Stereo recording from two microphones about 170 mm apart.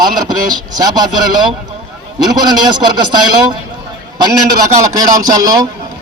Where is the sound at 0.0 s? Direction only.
25° right (ahead or behind).